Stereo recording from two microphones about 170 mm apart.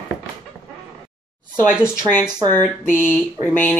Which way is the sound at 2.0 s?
15° left (ahead or behind).